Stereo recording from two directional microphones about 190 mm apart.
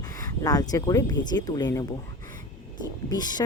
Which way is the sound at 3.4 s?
20° left (ahead or behind).